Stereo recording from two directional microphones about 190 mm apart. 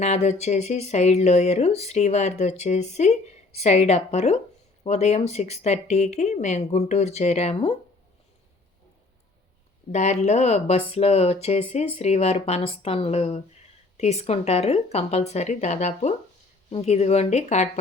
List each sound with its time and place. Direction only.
0.0 s speech: 35° left (ahead or behind)
9.9 s speech: 35° left (ahead or behind)